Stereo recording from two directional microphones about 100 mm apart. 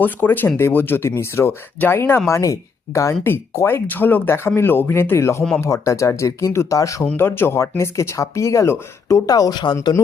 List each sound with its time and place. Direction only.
0.0 s speech: 20° left (ahead or behind)
7.0 s speech: 20° left (ahead or behind); by 9.7 s 45° left (ahead or behind)